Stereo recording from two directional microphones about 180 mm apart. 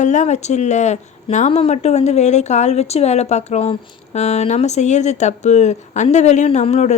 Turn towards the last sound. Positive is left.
turn(degrees=40)  # may be behind; listen again after turning